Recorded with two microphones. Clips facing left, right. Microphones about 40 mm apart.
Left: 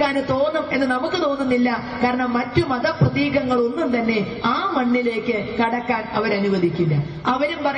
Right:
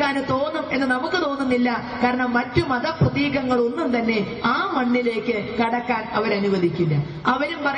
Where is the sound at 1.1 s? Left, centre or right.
Right.